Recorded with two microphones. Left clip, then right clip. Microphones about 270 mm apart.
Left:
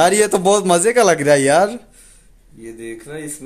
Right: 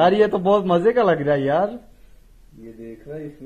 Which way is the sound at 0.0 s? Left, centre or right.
Left.